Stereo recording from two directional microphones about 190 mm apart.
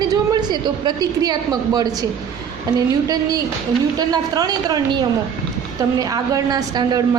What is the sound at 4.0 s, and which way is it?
A woman's voice, 20° right (ahead or behind).